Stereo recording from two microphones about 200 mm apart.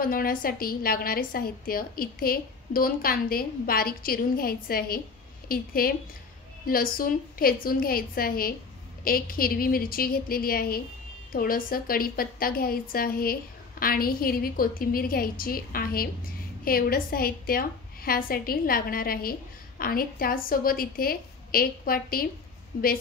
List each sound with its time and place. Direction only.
0.0 s a woman's voice: 45° left (ahead or behind)